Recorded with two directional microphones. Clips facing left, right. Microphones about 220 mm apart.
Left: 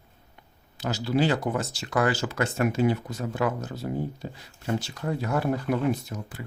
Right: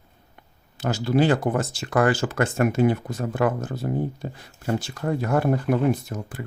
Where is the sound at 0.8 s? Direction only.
50° right (ahead or behind).